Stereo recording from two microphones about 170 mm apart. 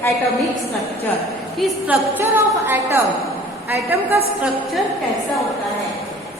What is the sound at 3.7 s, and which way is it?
Speech, 15° right (ahead or behind).